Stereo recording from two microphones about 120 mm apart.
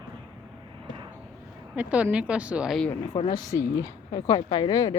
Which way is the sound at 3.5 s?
25° left (ahead or behind).